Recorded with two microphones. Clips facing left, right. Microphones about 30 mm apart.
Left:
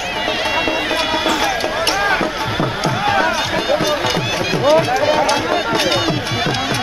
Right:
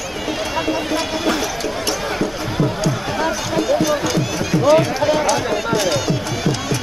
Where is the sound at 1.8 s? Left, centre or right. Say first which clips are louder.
Left 6 dB; left.